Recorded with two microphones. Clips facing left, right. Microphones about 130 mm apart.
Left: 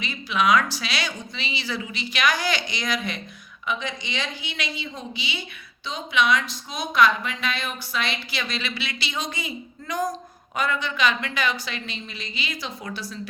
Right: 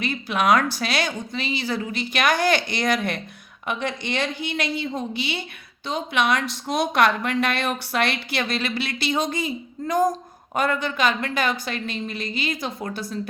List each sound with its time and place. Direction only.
0.0 s speech: 55° right (ahead or behind)